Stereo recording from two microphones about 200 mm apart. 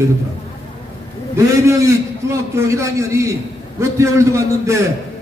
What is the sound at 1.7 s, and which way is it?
A man's voice, 15° right (ahead or behind).